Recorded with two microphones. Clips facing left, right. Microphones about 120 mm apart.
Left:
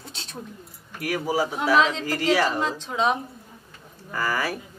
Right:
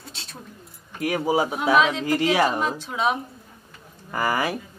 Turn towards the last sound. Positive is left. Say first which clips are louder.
# right 3 dB
turn(degrees=-20)  # may be behind; listen again after turning